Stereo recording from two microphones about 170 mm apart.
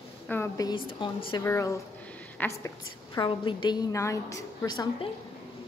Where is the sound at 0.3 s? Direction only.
20° left (ahead or behind).